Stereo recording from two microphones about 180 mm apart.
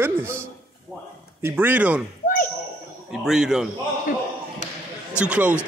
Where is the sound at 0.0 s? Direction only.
10° right (ahead or behind).